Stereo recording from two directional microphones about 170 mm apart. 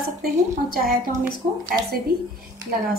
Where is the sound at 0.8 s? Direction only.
55° right (ahead or behind).